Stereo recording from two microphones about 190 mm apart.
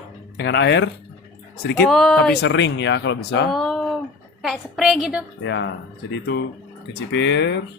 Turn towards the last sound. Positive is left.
turn(degrees=65)  # may be behind; listen again after turning